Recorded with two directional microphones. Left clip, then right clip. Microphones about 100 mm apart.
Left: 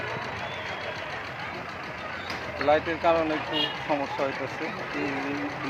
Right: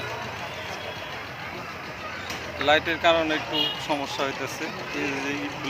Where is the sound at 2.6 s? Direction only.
5° right (ahead or behind).